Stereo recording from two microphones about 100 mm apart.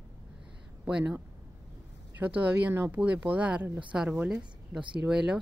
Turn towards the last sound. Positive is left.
turn(degrees=-10)  # may be behind; listen again after turning